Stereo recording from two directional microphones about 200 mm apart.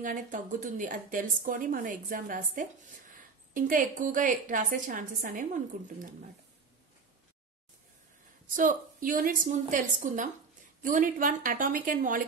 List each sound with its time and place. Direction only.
0.0 s a woman's voice: 40° right (ahead or behind)
8.5 s a woman's voice: 40° right (ahead or behind)